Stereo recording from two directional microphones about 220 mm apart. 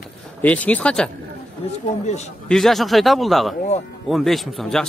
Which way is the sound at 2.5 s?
Centre (ahead or behind).